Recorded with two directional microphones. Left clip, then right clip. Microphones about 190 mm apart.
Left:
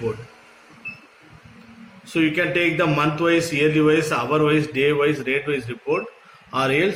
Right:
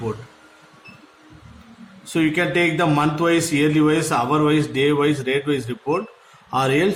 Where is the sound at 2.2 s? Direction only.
60° right (ahead or behind); by 5.8 s 90° right.